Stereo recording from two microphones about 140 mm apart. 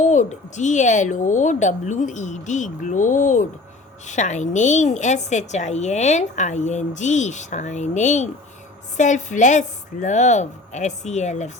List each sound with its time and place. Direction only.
0.0 s a woman's voice: 60° left (ahead or behind)